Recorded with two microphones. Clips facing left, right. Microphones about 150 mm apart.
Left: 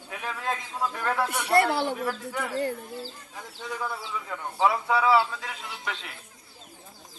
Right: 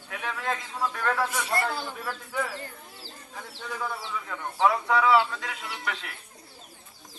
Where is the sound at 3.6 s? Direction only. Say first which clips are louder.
Left 1 dB; 10° left (ahead or behind).